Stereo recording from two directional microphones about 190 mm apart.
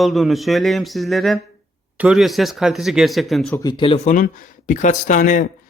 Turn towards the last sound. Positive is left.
turn(degrees=45)  # may be behind; listen again after turning